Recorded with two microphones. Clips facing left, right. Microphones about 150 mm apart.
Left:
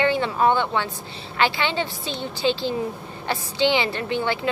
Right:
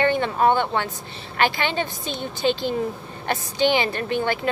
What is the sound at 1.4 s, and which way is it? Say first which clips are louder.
Speech: even; 50° right (ahead or behind).